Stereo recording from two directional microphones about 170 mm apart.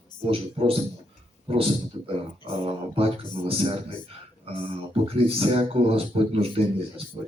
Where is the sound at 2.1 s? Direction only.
30° right (ahead or behind).